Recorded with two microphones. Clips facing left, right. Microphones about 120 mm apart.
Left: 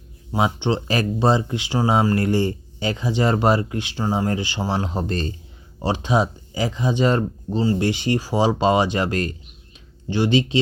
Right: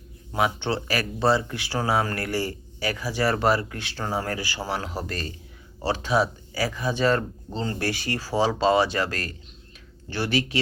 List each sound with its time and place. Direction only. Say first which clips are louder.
0.3 s speech: left 4 dB; 20° left (ahead or behind)